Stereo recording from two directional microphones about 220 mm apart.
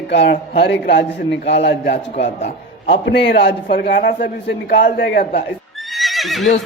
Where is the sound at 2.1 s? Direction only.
30° left (ahead or behind).